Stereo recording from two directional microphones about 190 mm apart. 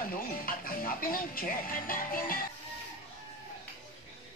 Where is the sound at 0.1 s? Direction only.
50° left (ahead or behind).